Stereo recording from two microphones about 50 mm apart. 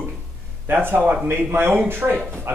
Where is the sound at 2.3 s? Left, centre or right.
Right.